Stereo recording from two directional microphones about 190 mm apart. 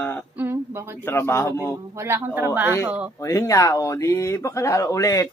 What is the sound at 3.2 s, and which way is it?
Speech, 15° left (ahead or behind).